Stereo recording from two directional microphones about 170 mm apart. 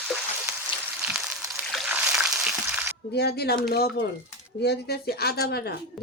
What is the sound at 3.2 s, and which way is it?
Speech, 70° left (ahead or behind).